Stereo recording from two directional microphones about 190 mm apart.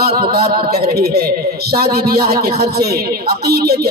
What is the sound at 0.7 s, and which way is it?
A man's voice, 55° right (ahead or behind).